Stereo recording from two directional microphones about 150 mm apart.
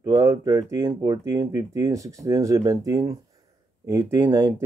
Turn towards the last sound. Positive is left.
turn(degrees=-25)  # may be behind; listen again after turning